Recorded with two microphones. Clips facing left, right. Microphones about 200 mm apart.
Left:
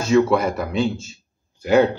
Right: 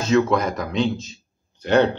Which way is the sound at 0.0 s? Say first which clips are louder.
Left 2 dB; 10° left (ahead or behind).